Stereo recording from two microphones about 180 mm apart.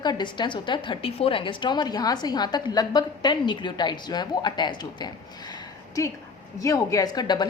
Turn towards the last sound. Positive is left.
turn(degrees=25)  # may be behind; listen again after turning